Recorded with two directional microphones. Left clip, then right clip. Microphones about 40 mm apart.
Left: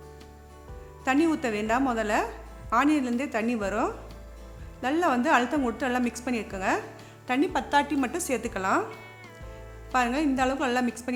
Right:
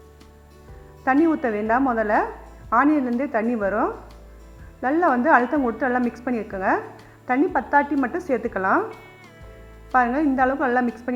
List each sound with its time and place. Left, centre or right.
1.2 s a woman's voice: left
7.3 s a woman's voice: left
8.3 s a woman's voice: left
9.9 s a woman's voice: left